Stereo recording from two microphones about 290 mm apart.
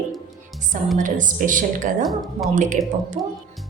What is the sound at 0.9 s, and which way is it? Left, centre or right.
Speech, right.